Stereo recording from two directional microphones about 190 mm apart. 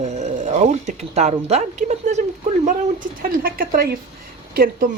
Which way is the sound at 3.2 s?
50° right (ahead or behind).